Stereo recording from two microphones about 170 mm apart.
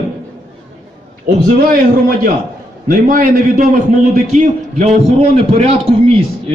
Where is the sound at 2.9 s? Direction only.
55° right (ahead or behind); by 6.5 s 35° right (ahead or behind).